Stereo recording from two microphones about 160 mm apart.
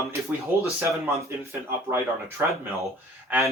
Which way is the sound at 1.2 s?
15° right (ahead or behind).